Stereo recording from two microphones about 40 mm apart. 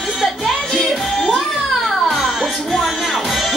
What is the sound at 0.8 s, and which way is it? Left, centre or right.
Music, centre.